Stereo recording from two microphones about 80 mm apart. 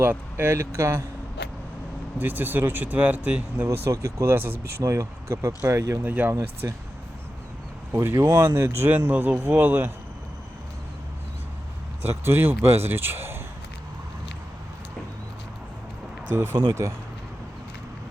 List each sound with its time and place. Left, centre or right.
0.0 s speech: right
2.1 s speech: right
3.7 s speech: right
6.0 s speech: right
7.9 s speech: right
12.2 s speech: right
16.3 s speech: right